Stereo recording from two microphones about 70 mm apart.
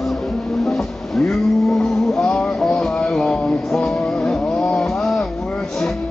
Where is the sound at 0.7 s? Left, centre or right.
Centre.